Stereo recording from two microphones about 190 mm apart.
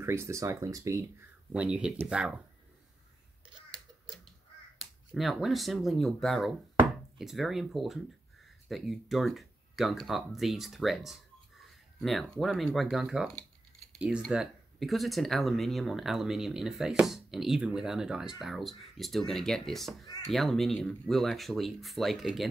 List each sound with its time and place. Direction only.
0.0 s speech: 15° right (ahead or behind)
1.5 s speech: 5° right (ahead or behind)
5.1 s speech: centre (ahead or behind)